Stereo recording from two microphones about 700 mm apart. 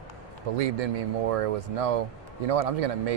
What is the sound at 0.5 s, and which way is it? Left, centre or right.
Speech, right.